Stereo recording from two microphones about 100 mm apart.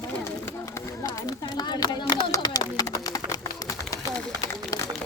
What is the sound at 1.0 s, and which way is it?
Speech, 40° left (ahead or behind).